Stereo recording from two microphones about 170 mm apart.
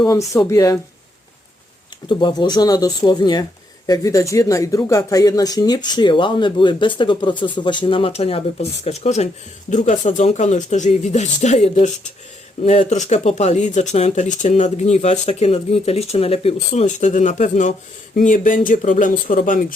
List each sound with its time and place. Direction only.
0.0 s speech: 20° left (ahead or behind)
2.0 s speech: 25° left (ahead or behind); by 19.6 s 55° left (ahead or behind)